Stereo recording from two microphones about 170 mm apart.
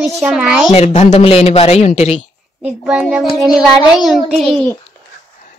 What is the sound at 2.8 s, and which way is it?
A child's voice, 5° right (ahead or behind).